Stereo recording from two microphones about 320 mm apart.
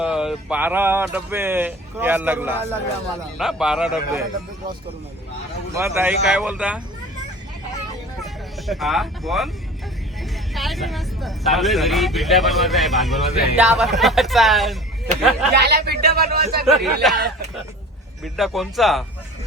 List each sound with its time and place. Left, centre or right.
0.0 s speech: centre
5.7 s speech: centre
8.2 s speech: centre
10.5 s speech: centre
15.5 s speech: right
16.6 s speech: centre
18.2 s speech: centre